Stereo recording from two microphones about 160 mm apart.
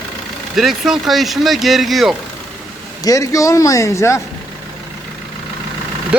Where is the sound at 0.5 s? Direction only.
Centre (ahead or behind).